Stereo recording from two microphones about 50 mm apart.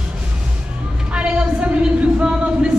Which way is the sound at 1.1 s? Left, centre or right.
Right.